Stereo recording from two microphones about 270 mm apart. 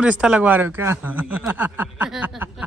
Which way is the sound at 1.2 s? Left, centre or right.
Centre.